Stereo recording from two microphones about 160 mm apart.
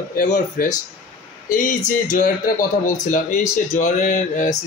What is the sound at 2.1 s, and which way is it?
Speech, 60° left (ahead or behind).